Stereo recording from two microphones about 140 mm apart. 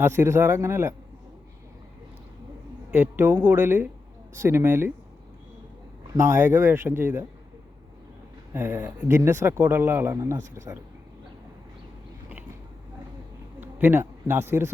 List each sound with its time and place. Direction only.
0.0 s speech: 15° right (ahead or behind)
2.9 s speech: 15° right (ahead or behind)
6.1 s speech: 20° right (ahead or behind)
8.5 s speech: 15° right (ahead or behind)
13.6 s speech: 15° right (ahead or behind)